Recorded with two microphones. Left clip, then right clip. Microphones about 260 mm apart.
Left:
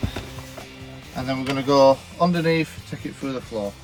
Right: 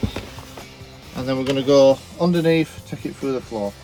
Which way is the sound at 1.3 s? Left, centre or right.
Centre.